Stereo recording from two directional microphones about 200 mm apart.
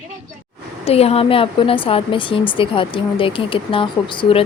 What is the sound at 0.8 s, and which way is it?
Speech, 30° left (ahead or behind).